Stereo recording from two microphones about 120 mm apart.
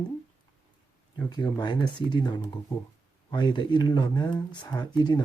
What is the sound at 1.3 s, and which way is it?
Speech, 35° left (ahead or behind).